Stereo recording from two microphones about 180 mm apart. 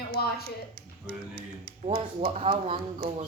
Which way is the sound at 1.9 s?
35° right (ahead or behind).